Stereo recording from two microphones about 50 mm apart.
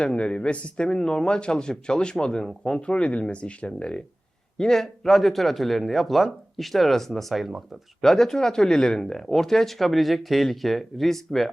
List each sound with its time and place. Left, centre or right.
0.0 s speech: centre
2.8 s a man's voice: left; by 7.8 s centre
8.0 s speech: centre